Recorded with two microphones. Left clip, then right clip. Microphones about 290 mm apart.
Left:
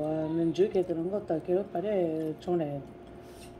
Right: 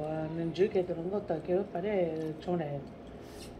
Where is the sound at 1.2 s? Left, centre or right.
Left.